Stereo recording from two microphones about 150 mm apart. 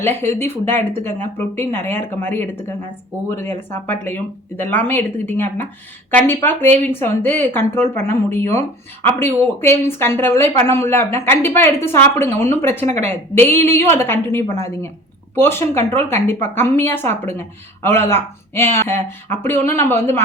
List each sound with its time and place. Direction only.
0.0 s speech: 15° left (ahead or behind)